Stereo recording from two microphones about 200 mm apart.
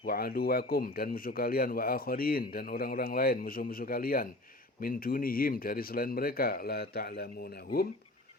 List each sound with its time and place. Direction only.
0.0 s speech: 50° left (ahead or behind)